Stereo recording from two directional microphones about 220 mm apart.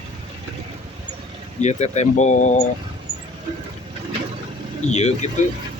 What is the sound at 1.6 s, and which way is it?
Speech, 30° left (ahead or behind).